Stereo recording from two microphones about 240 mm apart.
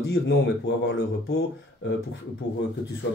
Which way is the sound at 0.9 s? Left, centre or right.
Left.